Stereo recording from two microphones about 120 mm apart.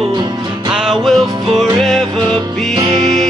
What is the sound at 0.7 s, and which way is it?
Music, 5° right (ahead or behind).